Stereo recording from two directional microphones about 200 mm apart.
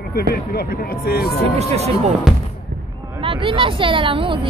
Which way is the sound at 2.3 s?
Centre (ahead or behind).